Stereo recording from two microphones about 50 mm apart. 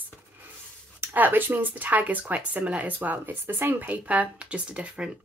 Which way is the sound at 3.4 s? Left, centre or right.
Right.